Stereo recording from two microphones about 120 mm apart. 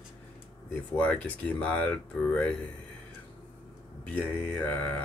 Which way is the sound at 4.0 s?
10° left (ahead or behind).